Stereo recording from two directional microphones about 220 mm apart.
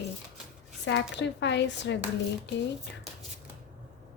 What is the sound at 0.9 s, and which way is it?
Speech, 55° left (ahead or behind).